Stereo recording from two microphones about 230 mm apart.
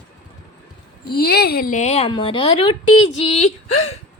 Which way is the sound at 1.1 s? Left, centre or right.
Left.